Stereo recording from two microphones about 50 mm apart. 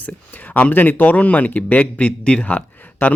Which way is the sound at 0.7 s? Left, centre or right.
Left.